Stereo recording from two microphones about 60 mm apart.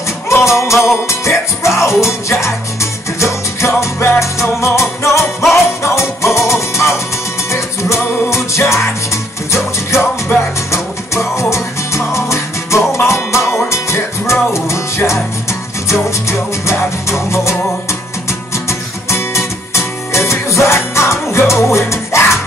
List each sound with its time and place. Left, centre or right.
0.3 s music: left
9.8 s music: left
18.7 s music: left